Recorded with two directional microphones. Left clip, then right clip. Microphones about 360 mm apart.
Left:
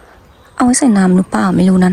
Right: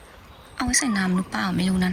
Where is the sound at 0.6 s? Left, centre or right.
Centre.